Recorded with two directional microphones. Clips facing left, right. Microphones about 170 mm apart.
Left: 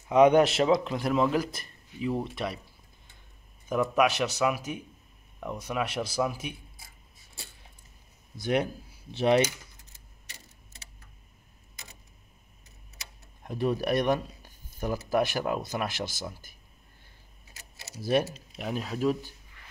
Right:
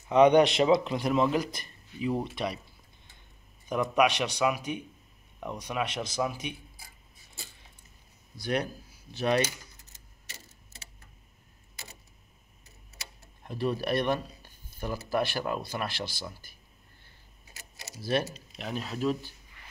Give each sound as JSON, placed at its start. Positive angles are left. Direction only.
{"t": 0.1, "sound": "speech", "side_deg": 5}
{"t": 3.6, "sound": "speech", "side_deg": 5}
{"t": 8.4, "sound": "speech", "side_deg": 20}
{"t": 13.4, "sound": "speech", "side_deg": 15}
{"t": 18.2, "sound": "speech", "side_deg": 10}